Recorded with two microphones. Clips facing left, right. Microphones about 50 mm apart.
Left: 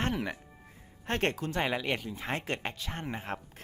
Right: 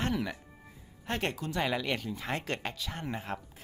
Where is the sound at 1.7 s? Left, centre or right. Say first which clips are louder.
Even; left.